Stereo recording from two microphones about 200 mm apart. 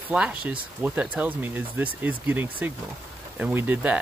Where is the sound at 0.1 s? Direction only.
5° right (ahead or behind).